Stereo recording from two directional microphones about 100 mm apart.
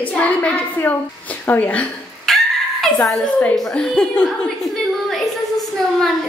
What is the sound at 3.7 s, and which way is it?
A woman's voice, 10° left (ahead or behind).